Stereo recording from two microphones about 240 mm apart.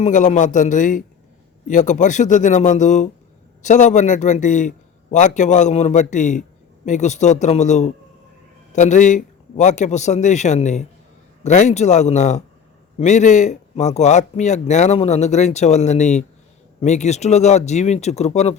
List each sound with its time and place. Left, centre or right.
0.0 s speech: left